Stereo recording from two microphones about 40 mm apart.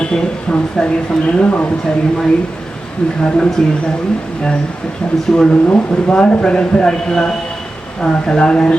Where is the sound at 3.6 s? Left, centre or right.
Centre.